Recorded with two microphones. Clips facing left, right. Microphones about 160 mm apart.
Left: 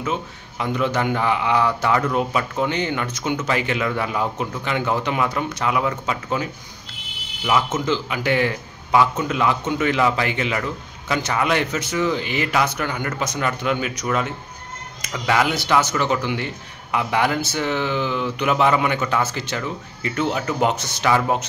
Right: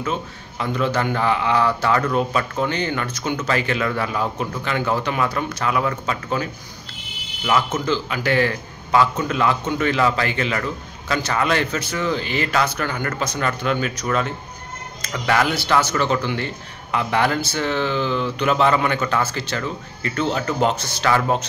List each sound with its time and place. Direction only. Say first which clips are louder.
0.0 s speech: even; 15° left (ahead or behind)